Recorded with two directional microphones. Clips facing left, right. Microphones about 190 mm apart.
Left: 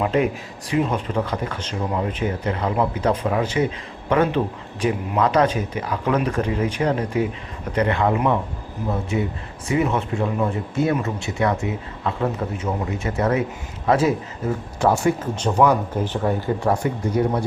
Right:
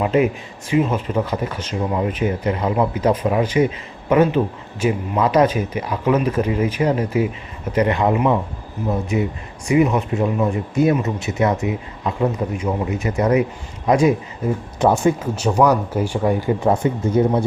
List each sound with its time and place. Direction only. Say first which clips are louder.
0.0 s speech: right 3 dB; 5° right (ahead or behind)
15.4 s speech: even; 10° right (ahead or behind)
16.6 s speech: right 3 dB; 25° right (ahead or behind)